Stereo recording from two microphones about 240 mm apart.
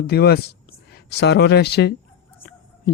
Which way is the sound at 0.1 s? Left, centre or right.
Left.